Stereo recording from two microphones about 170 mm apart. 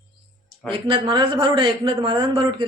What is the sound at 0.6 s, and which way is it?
A man's voice, 30° right (ahead or behind).